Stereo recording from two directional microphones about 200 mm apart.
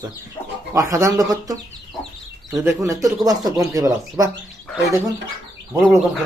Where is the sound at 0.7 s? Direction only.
15° right (ahead or behind).